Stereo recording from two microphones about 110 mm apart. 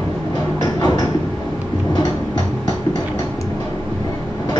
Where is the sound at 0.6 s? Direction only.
40° left (ahead or behind).